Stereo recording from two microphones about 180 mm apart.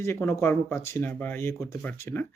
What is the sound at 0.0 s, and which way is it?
Speech, 15° left (ahead or behind).